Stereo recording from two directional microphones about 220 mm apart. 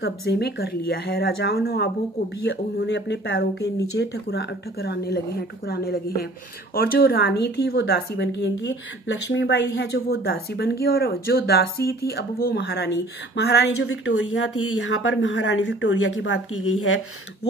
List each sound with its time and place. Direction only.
0.0 s speech: 45° left (ahead or behind)
13.8 s speech: 70° left (ahead or behind)